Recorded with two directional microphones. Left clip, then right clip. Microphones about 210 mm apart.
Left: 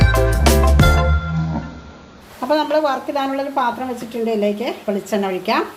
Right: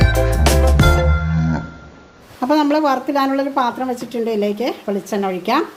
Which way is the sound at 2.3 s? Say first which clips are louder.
Right 1 dB; 35° right (ahead or behind).